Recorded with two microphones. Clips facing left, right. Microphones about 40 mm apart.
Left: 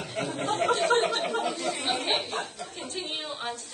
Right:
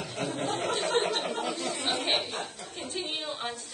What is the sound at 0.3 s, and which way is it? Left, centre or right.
Chatter, centre.